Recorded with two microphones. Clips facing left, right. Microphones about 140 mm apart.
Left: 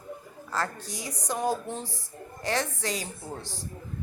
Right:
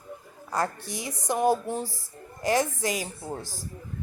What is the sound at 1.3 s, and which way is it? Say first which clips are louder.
Speech: right 5 dB; 15° right (ahead or behind).